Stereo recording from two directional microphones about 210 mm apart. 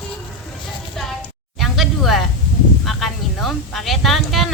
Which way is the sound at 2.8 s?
Centre (ahead or behind).